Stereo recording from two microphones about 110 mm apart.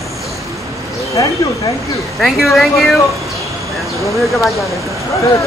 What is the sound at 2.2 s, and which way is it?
Speech, centre (ahead or behind).